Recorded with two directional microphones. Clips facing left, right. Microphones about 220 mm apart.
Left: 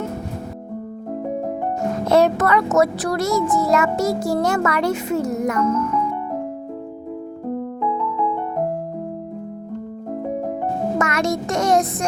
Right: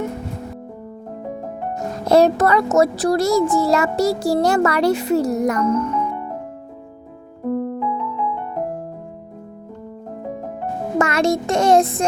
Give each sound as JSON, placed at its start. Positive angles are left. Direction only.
{"t": 2.0, "sound": "a child's voice", "side_deg": -35}
{"t": 10.9, "sound": "child singing", "side_deg": -30}